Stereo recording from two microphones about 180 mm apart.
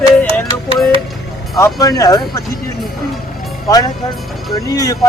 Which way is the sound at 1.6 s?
20° left (ahead or behind).